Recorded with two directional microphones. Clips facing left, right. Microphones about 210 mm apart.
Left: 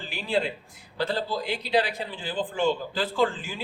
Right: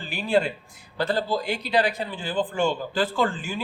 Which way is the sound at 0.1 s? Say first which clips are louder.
Right 4 dB; 50° right (ahead or behind).